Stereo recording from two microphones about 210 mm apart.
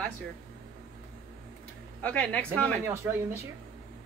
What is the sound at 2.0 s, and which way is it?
Speech, 5° left (ahead or behind).